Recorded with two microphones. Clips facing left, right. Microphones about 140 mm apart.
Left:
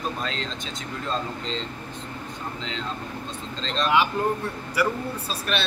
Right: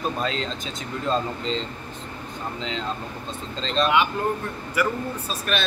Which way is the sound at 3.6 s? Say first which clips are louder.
Right 4 dB; centre (ahead or behind).